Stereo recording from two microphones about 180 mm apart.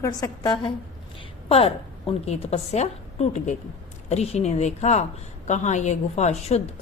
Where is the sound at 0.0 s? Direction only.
20° left (ahead or behind).